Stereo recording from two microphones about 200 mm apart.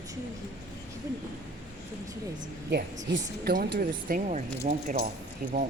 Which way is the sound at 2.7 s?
55° right (ahead or behind).